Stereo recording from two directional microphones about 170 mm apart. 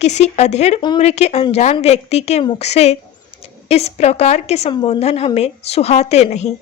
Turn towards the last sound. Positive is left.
turn(degrees=40)  # may be behind; listen again after turning